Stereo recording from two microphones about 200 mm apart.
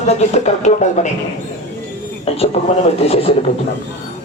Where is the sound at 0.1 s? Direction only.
35° left (ahead or behind).